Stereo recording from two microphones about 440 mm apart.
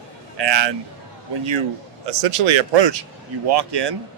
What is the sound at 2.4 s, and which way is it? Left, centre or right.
Speech, right.